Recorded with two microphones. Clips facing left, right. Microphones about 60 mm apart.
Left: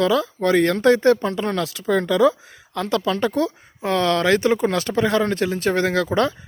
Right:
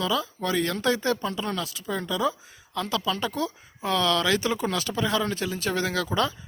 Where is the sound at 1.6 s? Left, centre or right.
Left.